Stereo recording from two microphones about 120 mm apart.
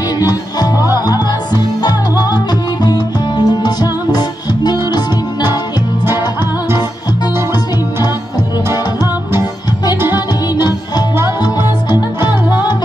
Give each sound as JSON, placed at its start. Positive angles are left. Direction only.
{"t": 0.2, "sound": "music", "side_deg": 35}
{"t": 10.1, "sound": "music", "side_deg": 35}